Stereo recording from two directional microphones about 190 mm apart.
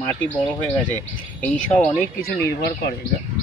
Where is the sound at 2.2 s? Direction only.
50° left (ahead or behind).